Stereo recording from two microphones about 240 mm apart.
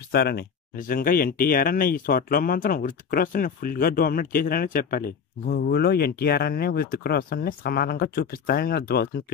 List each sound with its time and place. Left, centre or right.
0.1 s speech: left